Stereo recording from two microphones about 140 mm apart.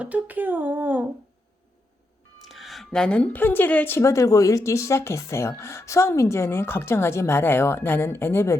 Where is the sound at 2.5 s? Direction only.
Centre (ahead or behind).